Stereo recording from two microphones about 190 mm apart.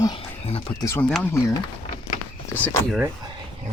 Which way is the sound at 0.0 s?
25° left (ahead or behind).